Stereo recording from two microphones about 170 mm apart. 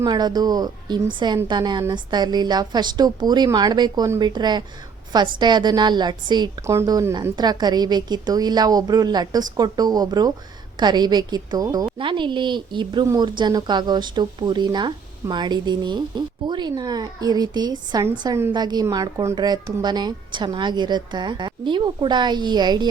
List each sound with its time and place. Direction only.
0.0 s speech: 25° right (ahead or behind)